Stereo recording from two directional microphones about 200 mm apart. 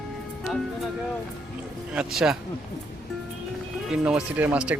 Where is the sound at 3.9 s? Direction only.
5° right (ahead or behind).